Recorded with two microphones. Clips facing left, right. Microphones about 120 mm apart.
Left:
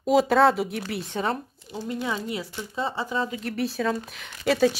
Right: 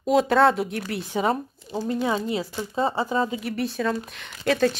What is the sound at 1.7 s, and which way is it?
Speech, 30° right (ahead or behind).